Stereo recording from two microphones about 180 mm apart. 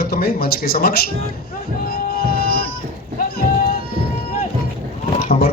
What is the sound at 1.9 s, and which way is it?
Music, 60° left (ahead or behind).